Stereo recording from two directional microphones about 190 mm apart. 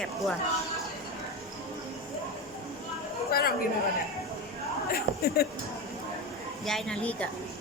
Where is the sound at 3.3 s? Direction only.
50° left (ahead or behind).